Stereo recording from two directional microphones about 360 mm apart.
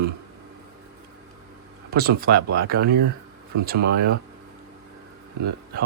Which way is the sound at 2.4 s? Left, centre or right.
Right.